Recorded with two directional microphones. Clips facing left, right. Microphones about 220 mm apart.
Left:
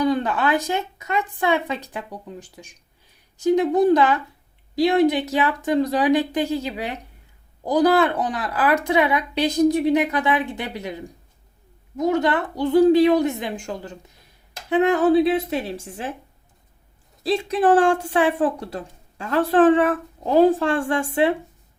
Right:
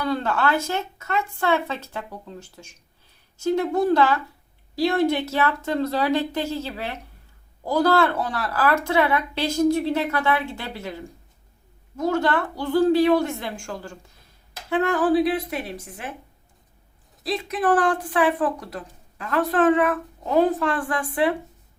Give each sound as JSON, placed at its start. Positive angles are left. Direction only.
{"t": 0.0, "sound": "speech", "side_deg": 15}
{"t": 17.2, "sound": "speech", "side_deg": 30}